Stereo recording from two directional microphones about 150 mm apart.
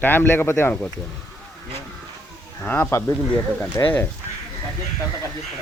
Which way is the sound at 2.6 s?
10° left (ahead or behind).